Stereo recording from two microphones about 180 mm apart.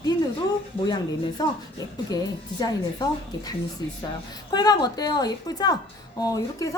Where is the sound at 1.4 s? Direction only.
20° left (ahead or behind).